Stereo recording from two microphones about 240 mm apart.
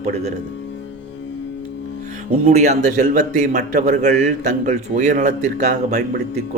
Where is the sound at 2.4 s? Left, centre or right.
Right.